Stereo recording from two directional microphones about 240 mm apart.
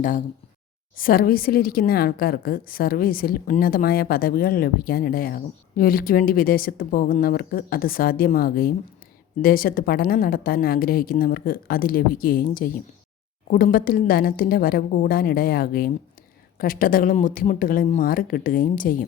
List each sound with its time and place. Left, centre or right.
0.9 s a woman's voice: left